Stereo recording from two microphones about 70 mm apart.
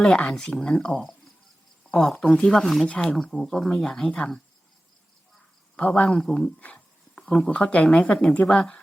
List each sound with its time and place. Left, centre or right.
0.3 s speech: centre
2.8 s speech: centre
5.7 s speech: centre
6.1 s speech: centre
6.6 s speech: left